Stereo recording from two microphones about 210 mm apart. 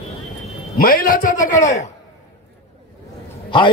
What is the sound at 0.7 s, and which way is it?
A man's voice, 45° left (ahead or behind).